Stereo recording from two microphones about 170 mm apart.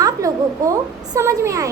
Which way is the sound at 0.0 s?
20° right (ahead or behind).